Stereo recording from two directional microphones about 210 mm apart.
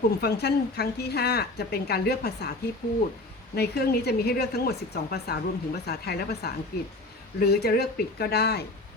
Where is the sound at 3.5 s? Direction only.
50° left (ahead or behind).